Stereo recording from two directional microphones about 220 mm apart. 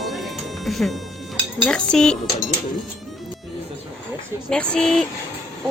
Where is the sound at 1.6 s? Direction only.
5° left (ahead or behind).